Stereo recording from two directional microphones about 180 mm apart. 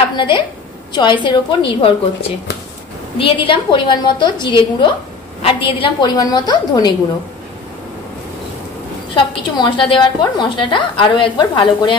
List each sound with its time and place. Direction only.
0.9 s a woman's voice: 25° left (ahead or behind)
9.1 s a woman's voice: 30° left (ahead or behind)